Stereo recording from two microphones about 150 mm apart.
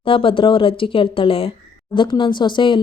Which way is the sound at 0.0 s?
35° left (ahead or behind).